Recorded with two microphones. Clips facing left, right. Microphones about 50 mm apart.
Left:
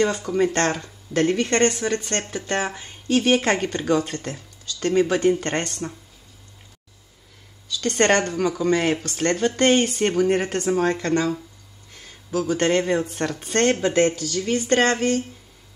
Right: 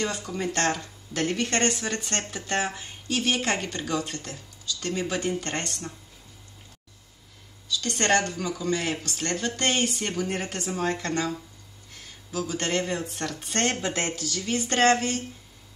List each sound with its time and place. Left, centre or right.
0.0 s speech: left
7.6 s speech: left